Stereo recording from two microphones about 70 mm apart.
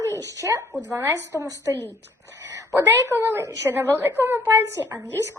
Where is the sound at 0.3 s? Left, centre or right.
Right.